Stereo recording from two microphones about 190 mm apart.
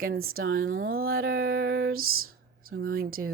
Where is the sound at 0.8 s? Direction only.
50° right (ahead or behind).